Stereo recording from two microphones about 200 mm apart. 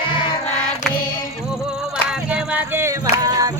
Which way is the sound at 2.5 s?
10° right (ahead or behind).